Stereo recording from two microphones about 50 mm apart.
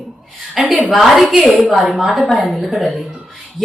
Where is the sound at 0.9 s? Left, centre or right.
Centre.